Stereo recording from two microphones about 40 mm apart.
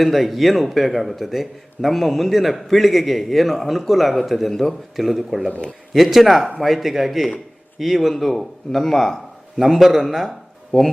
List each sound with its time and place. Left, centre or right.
0.0 s speech: centre
5.5 s speech: left
5.9 s speech: centre
9.6 s speech: centre
10.7 s speech: centre